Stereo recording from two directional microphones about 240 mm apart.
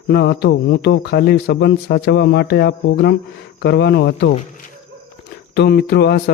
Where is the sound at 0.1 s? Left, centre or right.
Left.